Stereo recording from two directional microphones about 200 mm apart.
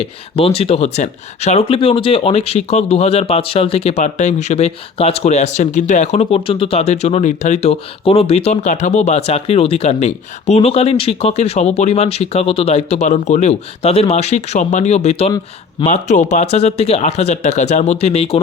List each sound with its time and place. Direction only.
0.0 s speech: 30° left (ahead or behind)